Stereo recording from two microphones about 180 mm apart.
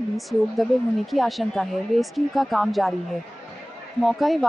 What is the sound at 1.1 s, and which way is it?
Speech, centre (ahead or behind).